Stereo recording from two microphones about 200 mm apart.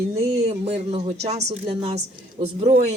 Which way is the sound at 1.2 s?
35° right (ahead or behind).